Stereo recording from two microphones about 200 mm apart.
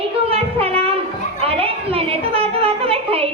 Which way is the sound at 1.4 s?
30° right (ahead or behind).